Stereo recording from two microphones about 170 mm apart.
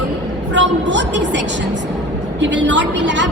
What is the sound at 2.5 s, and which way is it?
Speech, 90° right.